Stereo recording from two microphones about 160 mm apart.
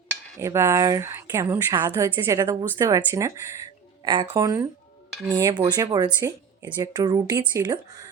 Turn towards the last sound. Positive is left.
turn(degrees=-25)  # may be behind; listen again after turning